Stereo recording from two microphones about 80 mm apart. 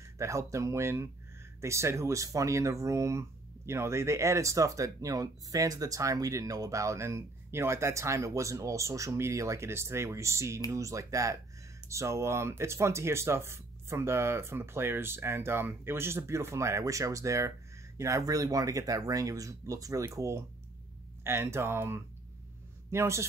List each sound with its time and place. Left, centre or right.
0.2 s speech: right